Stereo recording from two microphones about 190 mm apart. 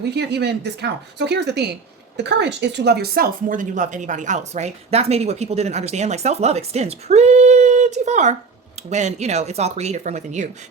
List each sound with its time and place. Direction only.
0.0 s speech: 60° right (ahead or behind); by 10.5 s 40° right (ahead or behind)